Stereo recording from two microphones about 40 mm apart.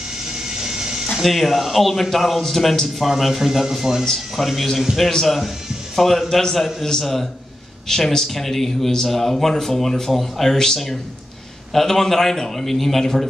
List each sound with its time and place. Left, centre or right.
0.2 s printer: centre
1.1 s speech: centre
5.1 s speech: centre